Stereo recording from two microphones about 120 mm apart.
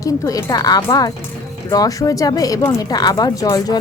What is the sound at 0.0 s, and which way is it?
Speech, 30° left (ahead or behind).